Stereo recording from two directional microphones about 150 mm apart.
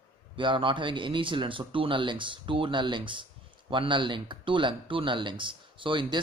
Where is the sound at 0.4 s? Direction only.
35° right (ahead or behind).